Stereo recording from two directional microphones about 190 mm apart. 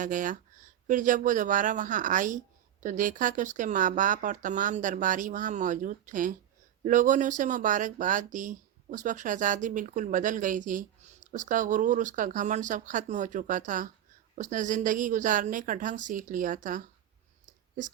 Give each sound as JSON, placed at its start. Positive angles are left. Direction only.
{"t": 0.0, "sound": "speech", "side_deg": -45}